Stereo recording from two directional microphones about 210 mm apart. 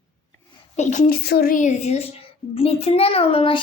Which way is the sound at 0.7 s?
35° left (ahead or behind).